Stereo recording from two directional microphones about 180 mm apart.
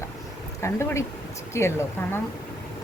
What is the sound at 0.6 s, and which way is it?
Speech, 15° left (ahead or behind).